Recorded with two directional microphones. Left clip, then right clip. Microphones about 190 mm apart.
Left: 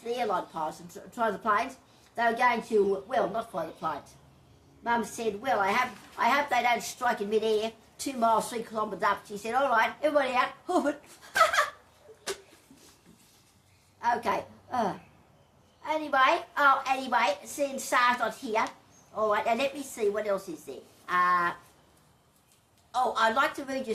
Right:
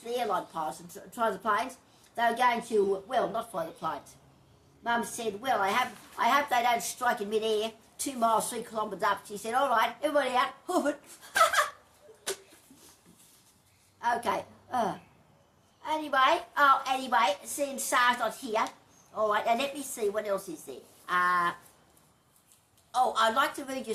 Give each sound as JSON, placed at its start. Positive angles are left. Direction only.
{"t": 0.0, "sound": "a woman's voice", "side_deg": -20}
{"t": 14.0, "sound": "a woman's voice", "side_deg": -15}
{"t": 22.9, "sound": "a woman's voice", "side_deg": -20}